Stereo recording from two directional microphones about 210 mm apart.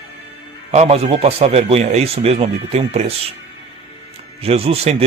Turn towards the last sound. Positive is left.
turn(degrees=-30)  # may be behind; listen again after turning